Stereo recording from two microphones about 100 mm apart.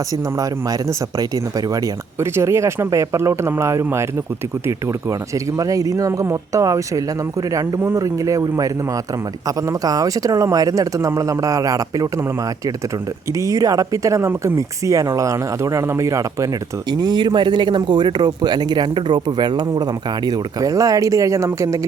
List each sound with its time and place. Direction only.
1.2 s speech: 35° right (ahead or behind)
13.4 s speech: 35° right (ahead or behind)
16.9 s speech: 45° right (ahead or behind)